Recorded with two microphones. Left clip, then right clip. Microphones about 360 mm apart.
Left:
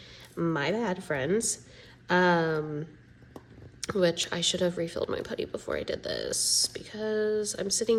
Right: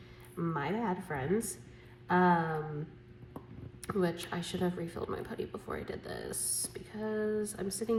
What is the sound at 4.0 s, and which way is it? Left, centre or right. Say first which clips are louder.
Speech: left 9 dB; centre.